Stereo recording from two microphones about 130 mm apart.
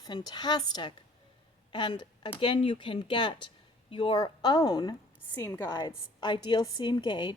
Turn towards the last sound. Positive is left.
turn(degrees=35)  # may be behind; listen again after turning